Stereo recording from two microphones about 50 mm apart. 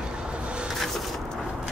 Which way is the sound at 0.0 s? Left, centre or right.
Centre.